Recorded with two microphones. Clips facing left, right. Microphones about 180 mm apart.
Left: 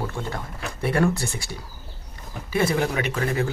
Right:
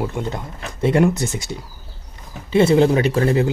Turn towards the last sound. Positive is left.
turn(degrees=-30)  # may be behind; listen again after turning